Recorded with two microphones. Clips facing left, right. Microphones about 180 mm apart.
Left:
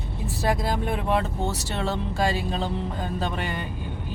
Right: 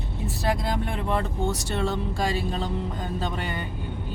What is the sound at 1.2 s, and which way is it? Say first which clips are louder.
Speech: right 1 dB; 65° left (ahead or behind).